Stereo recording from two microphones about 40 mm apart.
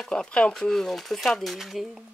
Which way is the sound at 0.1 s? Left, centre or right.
Left.